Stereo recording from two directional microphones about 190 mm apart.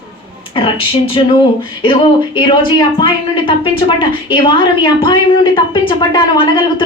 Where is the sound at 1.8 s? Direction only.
25° left (ahead or behind).